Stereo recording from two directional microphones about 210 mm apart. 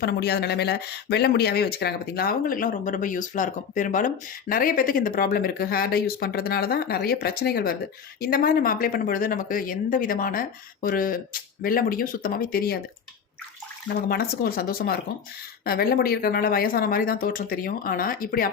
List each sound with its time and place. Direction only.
0.0 s speech: 50° left (ahead or behind)
14.1 s speech: 45° left (ahead or behind)